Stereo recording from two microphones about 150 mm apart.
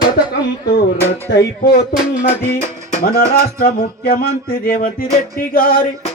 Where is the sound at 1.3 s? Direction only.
90° left.